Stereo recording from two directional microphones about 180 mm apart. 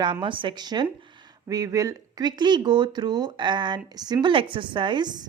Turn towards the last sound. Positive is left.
turn(degrees=-25)  # may be behind; listen again after turning